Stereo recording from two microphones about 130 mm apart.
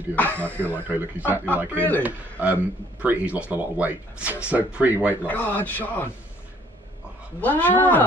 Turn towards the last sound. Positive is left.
turn(degrees=15)  # may be behind; listen again after turning